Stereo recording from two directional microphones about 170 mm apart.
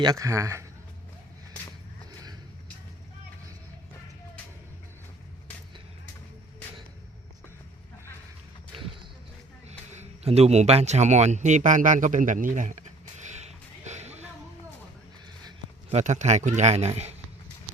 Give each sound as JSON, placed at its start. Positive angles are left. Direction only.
{"t": 0.0, "sound": "speech", "side_deg": -20}
{"t": 9.6, "sound": "a sound", "side_deg": -40}
{"t": 15.9, "sound": "speech", "side_deg": -45}